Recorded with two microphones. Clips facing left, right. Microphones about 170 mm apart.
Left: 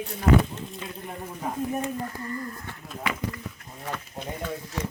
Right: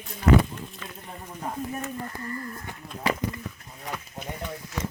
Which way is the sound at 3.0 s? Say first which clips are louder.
Right 4 dB; 35° right (ahead or behind).